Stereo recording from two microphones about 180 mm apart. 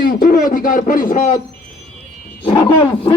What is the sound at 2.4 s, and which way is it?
Roaring cats, 25° left (ahead or behind).